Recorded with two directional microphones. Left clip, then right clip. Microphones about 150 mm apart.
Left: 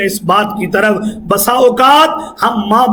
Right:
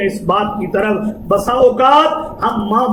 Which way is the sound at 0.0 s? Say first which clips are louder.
Left 3 dB; 35° left (ahead or behind).